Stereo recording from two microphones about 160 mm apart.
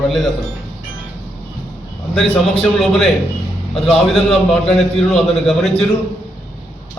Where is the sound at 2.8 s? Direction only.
Centre (ahead or behind).